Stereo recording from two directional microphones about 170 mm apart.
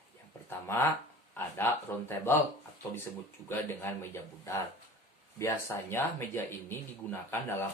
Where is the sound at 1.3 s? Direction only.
10° left (ahead or behind).